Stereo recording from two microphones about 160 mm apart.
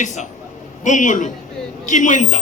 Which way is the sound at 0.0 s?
50° left (ahead or behind).